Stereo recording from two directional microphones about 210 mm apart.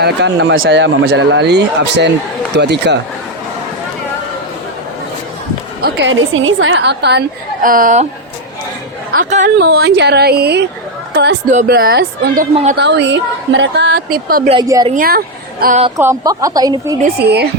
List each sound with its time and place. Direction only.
0.0 s a woman's voice: 55° right (ahead or behind)
5.8 s a woman's voice: 65° right (ahead or behind); by 8.0 s 40° right (ahead or behind)
9.1 s a woman's voice: 40° right (ahead or behind)
14.4 s a woman's voice: 20° right (ahead or behind)
14.9 s a woman's voice: 45° right (ahead or behind)
16.0 s a woman's voice: 15° right (ahead or behind)
17.2 s a woman's voice: 50° right (ahead or behind)